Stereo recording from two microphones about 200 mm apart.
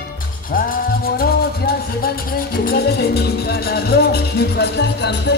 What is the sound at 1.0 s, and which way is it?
Music, 50° left (ahead or behind).